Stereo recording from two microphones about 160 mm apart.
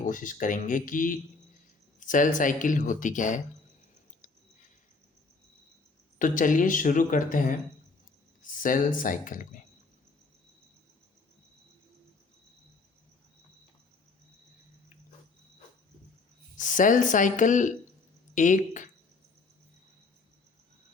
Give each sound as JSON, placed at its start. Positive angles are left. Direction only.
{"t": 0.0, "sound": "speech", "side_deg": 55}
{"t": 6.1, "sound": "speech", "side_deg": 55}
{"t": 16.6, "sound": "speech", "side_deg": 55}